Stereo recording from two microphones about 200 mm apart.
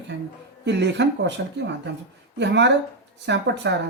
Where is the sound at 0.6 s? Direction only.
60° right (ahead or behind).